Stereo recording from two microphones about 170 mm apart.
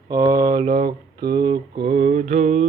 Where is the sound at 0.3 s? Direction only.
20° right (ahead or behind).